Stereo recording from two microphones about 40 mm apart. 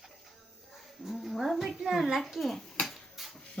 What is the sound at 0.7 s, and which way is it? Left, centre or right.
A child's voice, centre.